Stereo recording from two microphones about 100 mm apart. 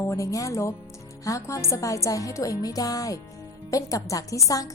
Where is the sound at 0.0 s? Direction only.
30° left (ahead or behind).